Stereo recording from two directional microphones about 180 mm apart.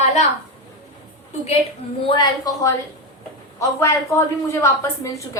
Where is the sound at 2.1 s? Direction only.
25° left (ahead or behind).